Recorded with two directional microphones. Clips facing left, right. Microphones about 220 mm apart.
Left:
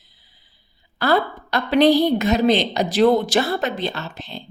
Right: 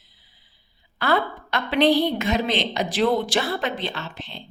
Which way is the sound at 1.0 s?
40° left (ahead or behind).